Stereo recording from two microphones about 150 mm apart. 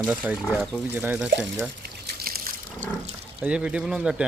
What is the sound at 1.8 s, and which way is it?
Liquid, 90° right.